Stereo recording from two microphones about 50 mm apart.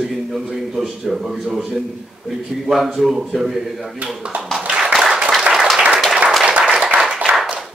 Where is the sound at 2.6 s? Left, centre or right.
Centre.